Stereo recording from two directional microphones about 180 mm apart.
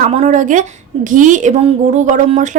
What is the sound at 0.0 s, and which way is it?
A woman's voice, 40° right (ahead or behind).